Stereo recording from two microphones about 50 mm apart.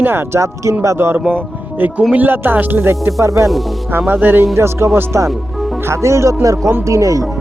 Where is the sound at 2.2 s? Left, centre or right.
Right.